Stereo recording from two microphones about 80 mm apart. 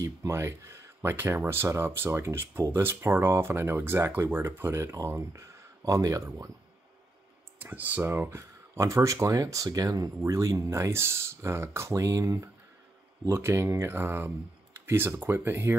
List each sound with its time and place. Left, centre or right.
0.0 s speech: right
7.5 s speech: right